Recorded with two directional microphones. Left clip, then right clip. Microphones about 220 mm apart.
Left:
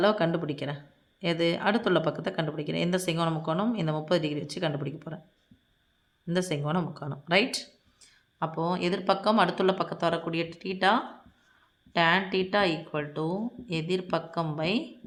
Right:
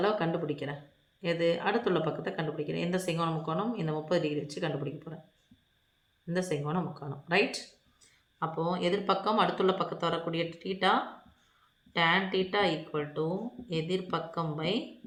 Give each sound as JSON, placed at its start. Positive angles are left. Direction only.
{"t": 0.0, "sound": "speech", "side_deg": 50}
{"t": 6.2, "sound": "speech", "side_deg": 45}
{"t": 11.9, "sound": "speech", "side_deg": 45}